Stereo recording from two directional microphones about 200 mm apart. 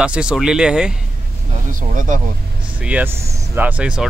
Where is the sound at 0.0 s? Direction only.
5° right (ahead or behind).